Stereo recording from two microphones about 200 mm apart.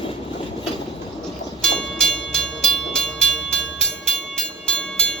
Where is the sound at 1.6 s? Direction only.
5° left (ahead or behind).